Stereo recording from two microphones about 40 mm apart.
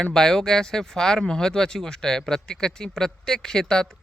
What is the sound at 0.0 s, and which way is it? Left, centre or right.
Speech, centre.